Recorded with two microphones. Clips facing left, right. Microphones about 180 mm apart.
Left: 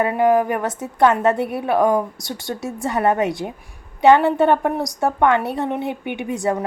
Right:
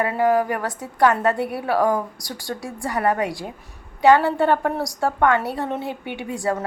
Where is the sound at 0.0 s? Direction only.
20° left (ahead or behind).